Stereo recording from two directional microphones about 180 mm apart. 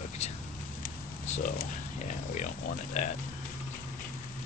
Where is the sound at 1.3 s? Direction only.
45° left (ahead or behind).